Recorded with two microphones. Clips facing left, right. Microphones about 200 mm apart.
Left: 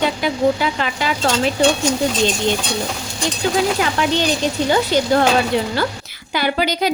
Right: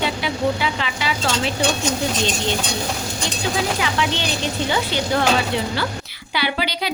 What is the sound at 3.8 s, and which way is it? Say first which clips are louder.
Speech: left 4 dB; 45° left (ahead or behind).